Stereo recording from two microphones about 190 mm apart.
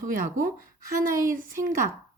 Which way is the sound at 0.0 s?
45° right (ahead or behind).